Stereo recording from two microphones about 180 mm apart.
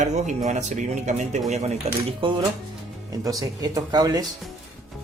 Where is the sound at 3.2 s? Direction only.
20° right (ahead or behind).